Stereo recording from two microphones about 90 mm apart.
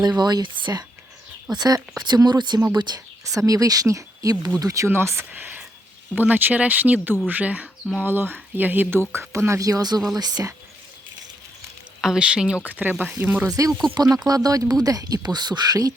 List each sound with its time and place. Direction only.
0.2 s speech: 50° right (ahead or behind)
3.2 s speech: 40° right (ahead or behind)
4.9 s speech: 30° right (ahead or behind); by 10.5 s 45° right (ahead or behind)
12.0 s speech: 10° right (ahead or behind)
13.5 s speech: 40° right (ahead or behind)